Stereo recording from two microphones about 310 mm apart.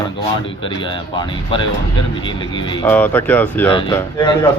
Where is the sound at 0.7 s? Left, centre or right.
Centre.